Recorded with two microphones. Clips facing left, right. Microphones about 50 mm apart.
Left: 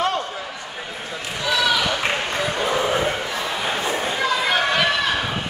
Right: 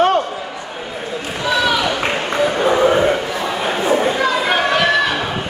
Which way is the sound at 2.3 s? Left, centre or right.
Right.